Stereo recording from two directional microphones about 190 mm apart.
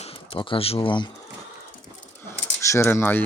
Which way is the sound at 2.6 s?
15° left (ahead or behind).